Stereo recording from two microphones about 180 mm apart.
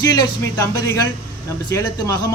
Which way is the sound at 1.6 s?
20° left (ahead or behind).